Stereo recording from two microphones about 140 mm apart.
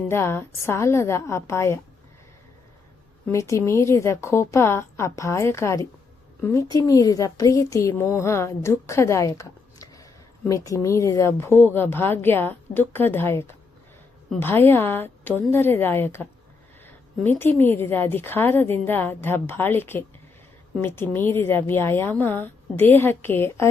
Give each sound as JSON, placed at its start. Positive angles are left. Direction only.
{"t": 0.1, "sound": "speech", "side_deg": 15}
{"t": 3.3, "sound": "a woman's voice", "side_deg": 20}
{"t": 16.8, "sound": "a sound", "side_deg": 15}
{"t": 17.6, "sound": "a woman's voice", "side_deg": 15}